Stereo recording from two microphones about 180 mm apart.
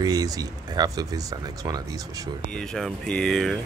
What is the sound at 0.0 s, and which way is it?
Speech, 20° right (ahead or behind).